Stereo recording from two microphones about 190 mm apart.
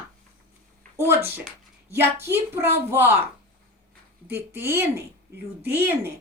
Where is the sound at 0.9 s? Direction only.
15° right (ahead or behind).